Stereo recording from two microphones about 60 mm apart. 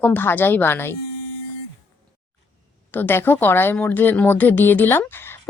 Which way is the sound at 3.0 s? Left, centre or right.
Left.